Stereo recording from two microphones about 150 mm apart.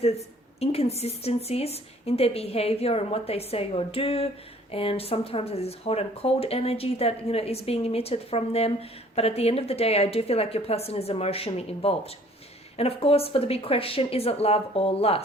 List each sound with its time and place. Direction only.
0.0 s speech: 45° left (ahead or behind)